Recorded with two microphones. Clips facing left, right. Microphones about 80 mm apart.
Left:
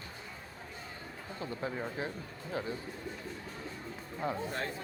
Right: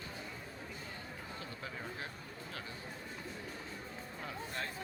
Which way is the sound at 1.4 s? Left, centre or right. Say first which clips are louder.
Left 11 dB; left.